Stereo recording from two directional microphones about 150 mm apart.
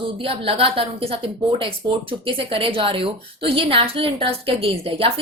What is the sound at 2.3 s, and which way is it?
A woman's voice, 35° right (ahead or behind).